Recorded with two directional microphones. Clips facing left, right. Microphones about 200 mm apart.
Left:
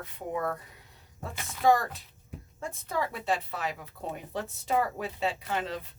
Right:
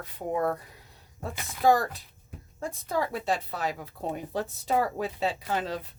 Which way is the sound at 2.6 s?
35° right (ahead or behind).